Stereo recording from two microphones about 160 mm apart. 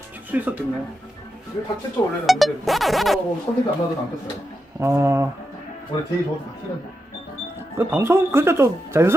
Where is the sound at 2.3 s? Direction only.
Centre (ahead or behind).